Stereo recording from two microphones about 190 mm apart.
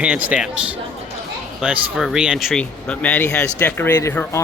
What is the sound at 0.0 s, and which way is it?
Speech, 5° right (ahead or behind).